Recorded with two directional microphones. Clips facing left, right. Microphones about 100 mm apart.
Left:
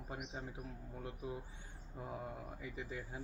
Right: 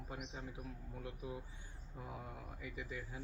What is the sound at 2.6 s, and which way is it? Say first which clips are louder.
Speech: even; 30° left (ahead or behind).